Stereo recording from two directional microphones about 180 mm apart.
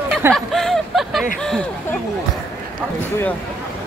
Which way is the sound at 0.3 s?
Centre (ahead or behind).